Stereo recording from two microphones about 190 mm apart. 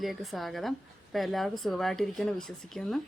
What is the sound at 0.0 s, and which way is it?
Speech, centre (ahead or behind).